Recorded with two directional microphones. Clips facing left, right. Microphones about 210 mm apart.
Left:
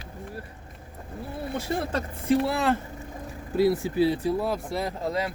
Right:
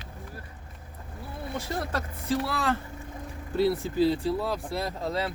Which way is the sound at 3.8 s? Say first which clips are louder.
Left 1 dB; 10° left (ahead or behind).